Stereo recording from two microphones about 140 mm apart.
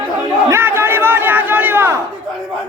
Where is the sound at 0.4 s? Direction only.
20° right (ahead or behind).